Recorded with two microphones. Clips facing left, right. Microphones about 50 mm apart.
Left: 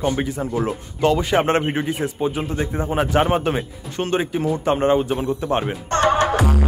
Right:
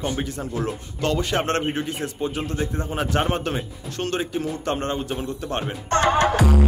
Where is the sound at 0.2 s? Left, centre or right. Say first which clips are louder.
Left 5 dB; centre.